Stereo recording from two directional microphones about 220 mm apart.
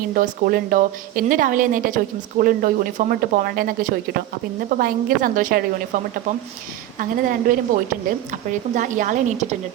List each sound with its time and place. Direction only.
0.1 s a woman's voice: 40° right (ahead or behind)
7.0 s a woman's voice: 40° right (ahead or behind)